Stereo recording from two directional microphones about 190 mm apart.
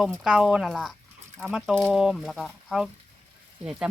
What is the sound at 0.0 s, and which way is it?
Speech, 5° right (ahead or behind).